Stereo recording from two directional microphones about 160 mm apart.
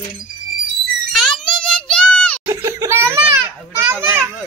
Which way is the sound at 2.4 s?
15° right (ahead or behind).